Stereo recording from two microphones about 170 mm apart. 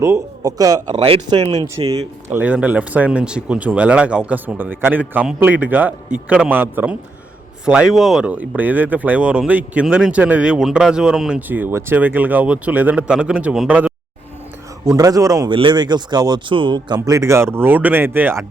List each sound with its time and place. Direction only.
0.0 s speech: 20° right (ahead or behind)
0.9 s speech: 35° right (ahead or behind)
1.6 s speech: 20° right (ahead or behind)
2.3 s speech: 10° right (ahead or behind)
14.8 s speech: 20° right (ahead or behind)